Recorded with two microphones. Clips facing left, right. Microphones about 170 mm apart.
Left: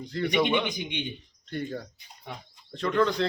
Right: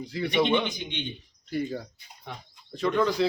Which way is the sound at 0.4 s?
15° left (ahead or behind).